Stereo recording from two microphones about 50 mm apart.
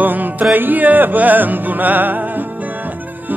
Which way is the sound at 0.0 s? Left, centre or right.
Right.